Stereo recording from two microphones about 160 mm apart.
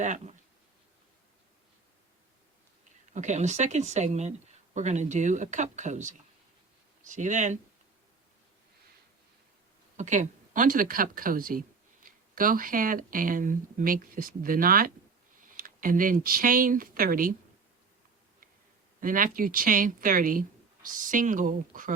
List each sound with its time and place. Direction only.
0.0 s speech: 50° right (ahead or behind)
3.1 s speech: 50° right (ahead or behind)
10.0 s speech: 50° right (ahead or behind)
18.9 s speech: 60° right (ahead or behind)